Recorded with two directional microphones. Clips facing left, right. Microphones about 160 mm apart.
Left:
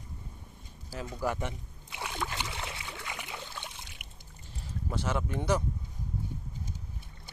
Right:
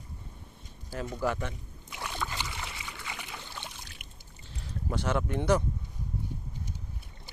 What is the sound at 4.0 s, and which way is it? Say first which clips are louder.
Music: right 1 dB; 70° left (ahead or behind).